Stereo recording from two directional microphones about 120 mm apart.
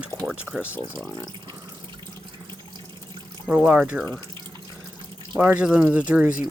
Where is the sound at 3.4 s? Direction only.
10° right (ahead or behind).